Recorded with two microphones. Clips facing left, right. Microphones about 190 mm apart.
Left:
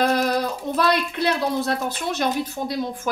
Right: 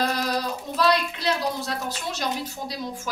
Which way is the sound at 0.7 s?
55° left (ahead or behind).